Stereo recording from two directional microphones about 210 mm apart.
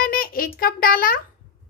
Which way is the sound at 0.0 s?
45° left (ahead or behind).